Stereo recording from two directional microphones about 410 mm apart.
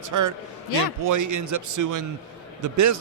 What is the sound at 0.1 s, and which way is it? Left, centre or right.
A man's voice, right.